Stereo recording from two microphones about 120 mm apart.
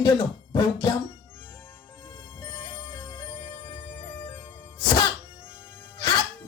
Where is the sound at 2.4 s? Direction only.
30° left (ahead or behind).